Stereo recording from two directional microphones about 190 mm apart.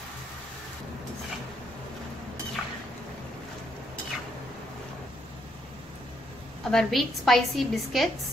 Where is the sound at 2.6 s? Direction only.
Centre (ahead or behind).